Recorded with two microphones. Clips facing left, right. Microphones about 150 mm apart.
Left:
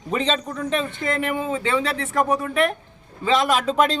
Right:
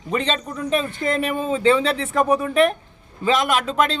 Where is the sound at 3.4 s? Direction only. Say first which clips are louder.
Left 1 dB; centre (ahead or behind).